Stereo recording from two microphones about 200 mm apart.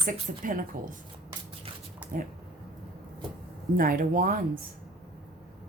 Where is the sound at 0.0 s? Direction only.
45° right (ahead or behind).